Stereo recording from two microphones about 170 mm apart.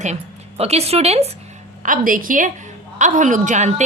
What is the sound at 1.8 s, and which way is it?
A woman's voice, 50° right (ahead or behind).